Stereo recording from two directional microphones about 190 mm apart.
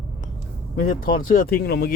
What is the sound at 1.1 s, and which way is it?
Speech, 50° left (ahead or behind).